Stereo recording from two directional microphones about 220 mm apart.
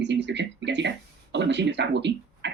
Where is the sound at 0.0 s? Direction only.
55° right (ahead or behind).